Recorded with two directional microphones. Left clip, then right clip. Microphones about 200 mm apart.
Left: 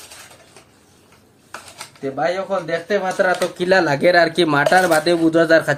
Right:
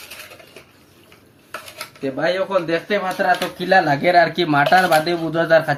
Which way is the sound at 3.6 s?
55° left (ahead or behind).